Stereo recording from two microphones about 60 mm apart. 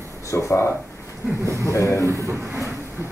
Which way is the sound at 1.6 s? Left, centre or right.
Left.